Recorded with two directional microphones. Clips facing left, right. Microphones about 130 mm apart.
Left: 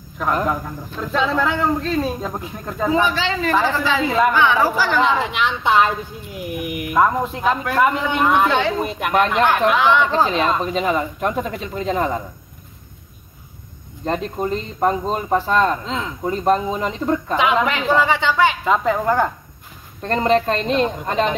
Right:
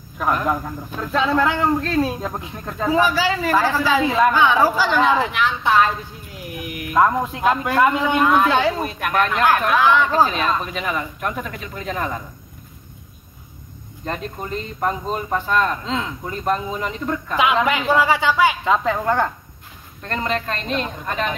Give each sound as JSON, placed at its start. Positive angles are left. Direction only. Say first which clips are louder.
{"t": 1.1, "sound": "a man's voice", "louder": "right 1 dB", "side_deg": 0}
{"t": 5.2, "sound": "a woman's voice", "louder": "even", "side_deg": 20}
{"t": 7.0, "sound": "a man's voice", "louder": "even", "side_deg": 0}
{"t": 8.2, "sound": "a woman's voice", "louder": "left 1 dB", "side_deg": 15}
{"t": 8.5, "sound": "a woman's voice", "louder": "right 1 dB", "side_deg": -10}
{"t": 8.8, "sound": "speech", "louder": "left 2 dB", "side_deg": 20}
{"t": 14.0, "sound": "speech", "louder": "left 6 dB", "side_deg": 30}
{"t": 17.6, "sound": "a woman's voice", "louder": "even", "side_deg": -10}
{"t": 18.6, "sound": "a man's voice", "louder": "left 1 dB", "side_deg": 5}
{"t": 20.0, "sound": "speech", "louder": "left 7 dB", "side_deg": 30}